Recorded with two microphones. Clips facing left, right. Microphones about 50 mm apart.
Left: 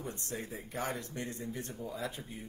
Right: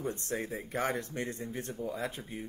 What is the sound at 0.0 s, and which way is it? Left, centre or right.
Speech, right.